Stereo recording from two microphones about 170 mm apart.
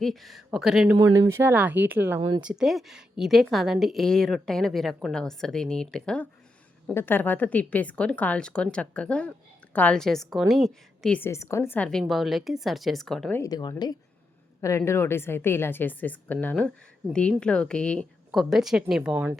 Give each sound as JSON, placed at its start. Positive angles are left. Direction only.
{"t": 0.0, "sound": "a woman's voice", "side_deg": 0}
{"t": 0.9, "sound": "a woman's voice", "side_deg": -20}
{"t": 13.4, "sound": "a woman's voice", "side_deg": 25}